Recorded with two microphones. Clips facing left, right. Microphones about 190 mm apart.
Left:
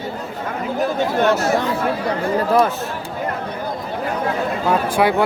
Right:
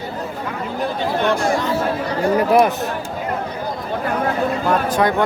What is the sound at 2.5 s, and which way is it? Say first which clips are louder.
Speech: right 1 dB; 15° right (ahead or behind).